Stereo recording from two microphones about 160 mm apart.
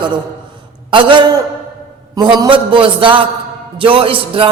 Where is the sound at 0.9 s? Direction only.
30° right (ahead or behind).